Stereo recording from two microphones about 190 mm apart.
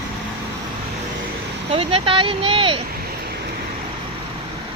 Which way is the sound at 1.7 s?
30° right (ahead or behind).